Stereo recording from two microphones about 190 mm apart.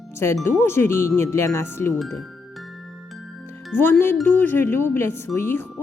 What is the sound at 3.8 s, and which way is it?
A woman's voice, 10° left (ahead or behind).